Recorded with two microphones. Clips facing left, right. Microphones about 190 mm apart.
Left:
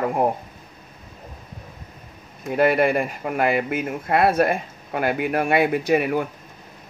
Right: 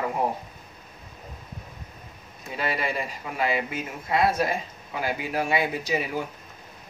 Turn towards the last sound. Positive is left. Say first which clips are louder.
# left 8 dB
turn(degrees=60)  # may be behind; listen again after turning